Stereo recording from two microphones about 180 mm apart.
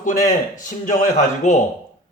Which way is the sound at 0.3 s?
45° left (ahead or behind).